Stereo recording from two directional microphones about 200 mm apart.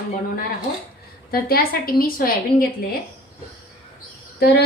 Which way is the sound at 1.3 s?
50° left (ahead or behind).